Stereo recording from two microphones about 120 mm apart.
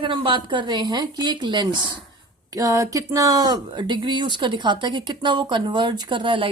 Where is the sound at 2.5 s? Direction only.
30° right (ahead or behind).